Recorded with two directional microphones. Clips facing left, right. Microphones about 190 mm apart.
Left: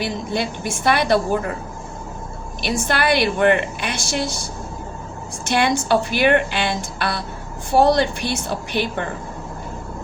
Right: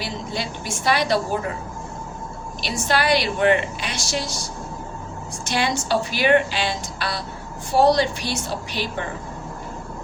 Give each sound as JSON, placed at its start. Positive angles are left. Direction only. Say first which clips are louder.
{"t": 0.0, "sound": "a woman's voice", "louder": "left 5 dB", "side_deg": 55}
{"t": 2.6, "sound": "a woman's voice", "louder": "left 1 dB", "side_deg": 55}
{"t": 5.5, "sound": "a woman's voice", "louder": "left 4 dB", "side_deg": 55}